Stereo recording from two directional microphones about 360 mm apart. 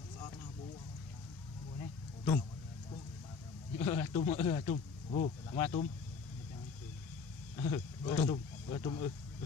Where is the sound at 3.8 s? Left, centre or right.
Centre.